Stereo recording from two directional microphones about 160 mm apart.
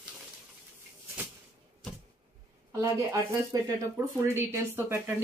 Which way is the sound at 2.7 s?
20° right (ahead or behind).